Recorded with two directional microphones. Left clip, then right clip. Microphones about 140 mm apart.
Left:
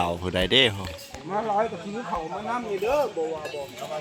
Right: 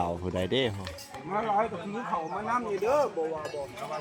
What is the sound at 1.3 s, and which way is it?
Speech, 45° left (ahead or behind).